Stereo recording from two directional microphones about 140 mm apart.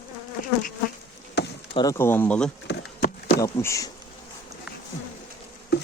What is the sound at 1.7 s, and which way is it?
Speech, 30° left (ahead or behind).